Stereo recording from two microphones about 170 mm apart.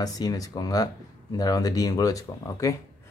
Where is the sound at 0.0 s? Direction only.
20° left (ahead or behind).